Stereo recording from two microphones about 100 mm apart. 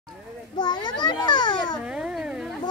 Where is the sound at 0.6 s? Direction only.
50° left (ahead or behind).